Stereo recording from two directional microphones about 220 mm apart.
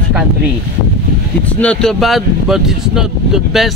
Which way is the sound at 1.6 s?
5° left (ahead or behind).